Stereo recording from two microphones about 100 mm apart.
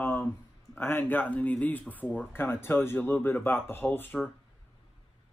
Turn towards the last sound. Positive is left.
turn(degrees=20)  # may be behind; listen again after turning